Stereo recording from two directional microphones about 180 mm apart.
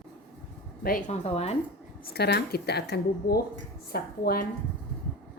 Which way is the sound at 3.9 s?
55° left (ahead or behind).